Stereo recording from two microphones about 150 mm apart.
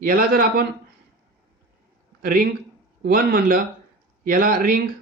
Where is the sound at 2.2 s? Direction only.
90° right; by 4.8 s 70° right (ahead or behind).